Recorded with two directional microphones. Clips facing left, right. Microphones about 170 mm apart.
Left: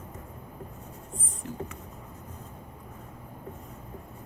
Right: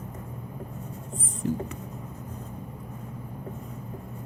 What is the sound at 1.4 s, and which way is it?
Speech, 30° right (ahead or behind).